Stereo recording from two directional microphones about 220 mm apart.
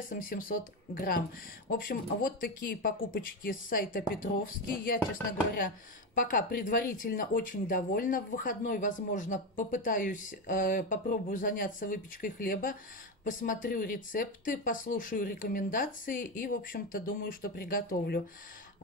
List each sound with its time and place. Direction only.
0.1 s speech: 40° left (ahead or behind)
6.1 s speech: 40° left (ahead or behind)